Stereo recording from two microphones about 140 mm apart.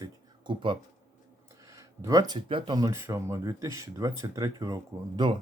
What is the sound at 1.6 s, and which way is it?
Speech, 25° right (ahead or behind).